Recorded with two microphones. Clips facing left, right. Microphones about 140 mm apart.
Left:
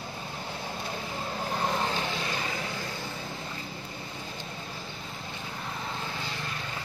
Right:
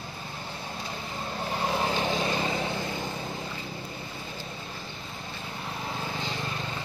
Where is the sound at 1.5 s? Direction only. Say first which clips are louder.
Right 2 dB; 5° right (ahead or behind); by 3.1 s 20° right (ahead or behind).